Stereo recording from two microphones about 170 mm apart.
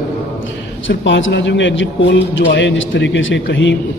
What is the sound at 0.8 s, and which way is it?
A man's voice, 90° left.